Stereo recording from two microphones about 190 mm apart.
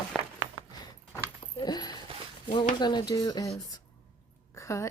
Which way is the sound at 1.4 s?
25° left (ahead or behind).